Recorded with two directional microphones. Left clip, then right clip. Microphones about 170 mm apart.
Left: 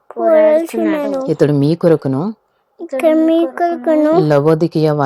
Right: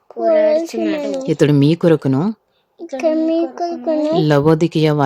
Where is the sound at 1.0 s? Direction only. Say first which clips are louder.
Left 3 dB; centre (ahead or behind).